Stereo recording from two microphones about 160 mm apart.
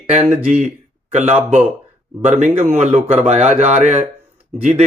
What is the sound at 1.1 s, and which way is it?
Speech, 50° right (ahead or behind).